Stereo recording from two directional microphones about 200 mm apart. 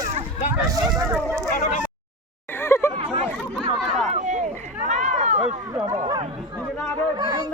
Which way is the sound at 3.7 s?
Centre (ahead or behind).